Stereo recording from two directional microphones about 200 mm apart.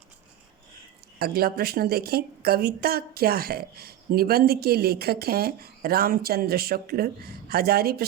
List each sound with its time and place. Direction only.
1.2 s a woman's voice: 50° right (ahead or behind)